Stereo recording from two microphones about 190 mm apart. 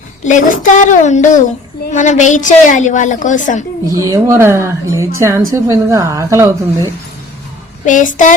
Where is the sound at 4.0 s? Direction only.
15° right (ahead or behind).